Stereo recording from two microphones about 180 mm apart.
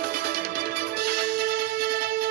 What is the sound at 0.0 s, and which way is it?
Music, 55° right (ahead or behind).